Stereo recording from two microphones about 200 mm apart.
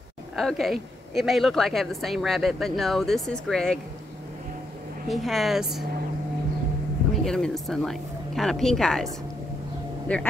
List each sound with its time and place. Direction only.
0.4 s a woman's voice: centre (ahead or behind)
5.0 s a woman's voice: centre (ahead or behind)
7.2 s a woman's voice: centre (ahead or behind)